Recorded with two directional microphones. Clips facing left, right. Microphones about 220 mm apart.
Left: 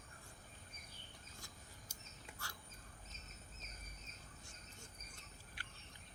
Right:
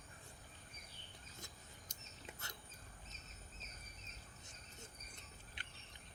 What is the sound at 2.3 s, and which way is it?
Bird, 20° right (ahead or behind).